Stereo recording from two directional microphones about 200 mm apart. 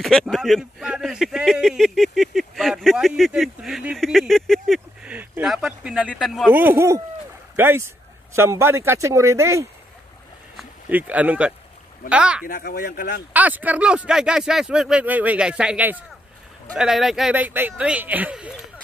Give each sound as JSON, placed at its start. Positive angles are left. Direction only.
{"t": 0.0, "sound": "speech", "side_deg": 0}
{"t": 12.4, "sound": "speech", "side_deg": 45}
{"t": 13.3, "sound": "speech", "side_deg": -10}